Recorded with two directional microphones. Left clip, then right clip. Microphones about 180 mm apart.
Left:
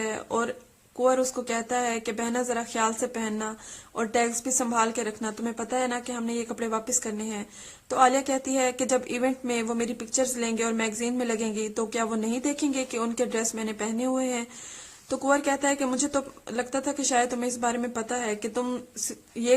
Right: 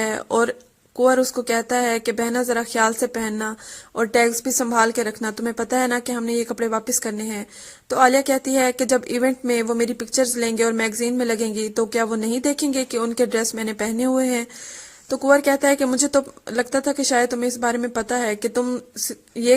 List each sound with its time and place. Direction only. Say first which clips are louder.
0.0 s speech: right 8 dB; 35° right (ahead or behind)